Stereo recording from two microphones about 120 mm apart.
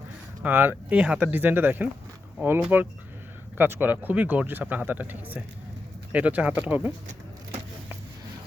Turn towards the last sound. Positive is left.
turn(degrees=-15)  # may be behind; listen again after turning